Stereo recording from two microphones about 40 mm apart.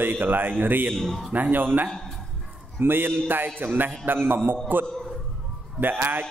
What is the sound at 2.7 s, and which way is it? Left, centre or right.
A man's voice, right.